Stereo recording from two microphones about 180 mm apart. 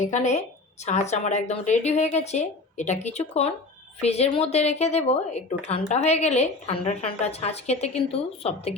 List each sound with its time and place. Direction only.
0.0 s a woman's voice: 40° left (ahead or behind)